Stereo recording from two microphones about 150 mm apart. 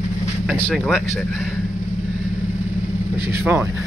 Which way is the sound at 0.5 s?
5° left (ahead or behind).